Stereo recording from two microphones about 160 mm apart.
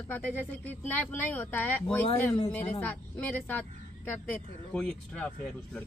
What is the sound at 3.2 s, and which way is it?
Speech, 10° left (ahead or behind).